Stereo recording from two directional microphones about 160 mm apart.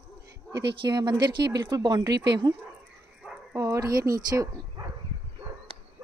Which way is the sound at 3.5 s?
20° right (ahead or behind).